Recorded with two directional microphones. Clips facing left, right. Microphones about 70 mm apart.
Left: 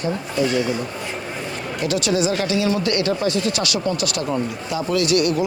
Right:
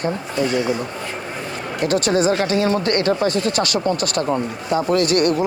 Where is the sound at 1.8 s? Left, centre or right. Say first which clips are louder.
Right 3 dB; right.